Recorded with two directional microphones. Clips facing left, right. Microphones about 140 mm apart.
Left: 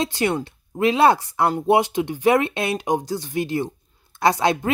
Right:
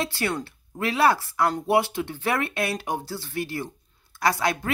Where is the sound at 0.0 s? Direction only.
20° left (ahead or behind).